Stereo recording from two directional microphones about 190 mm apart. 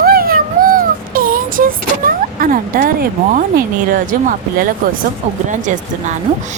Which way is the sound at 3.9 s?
45° right (ahead or behind).